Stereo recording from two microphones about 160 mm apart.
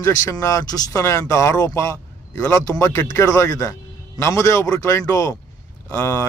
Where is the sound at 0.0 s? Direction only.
20° left (ahead or behind).